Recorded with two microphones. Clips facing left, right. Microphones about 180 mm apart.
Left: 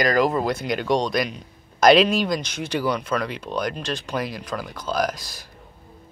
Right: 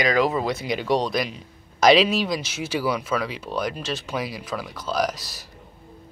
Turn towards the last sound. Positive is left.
turn(degrees=0)  # may be behind; listen again after turning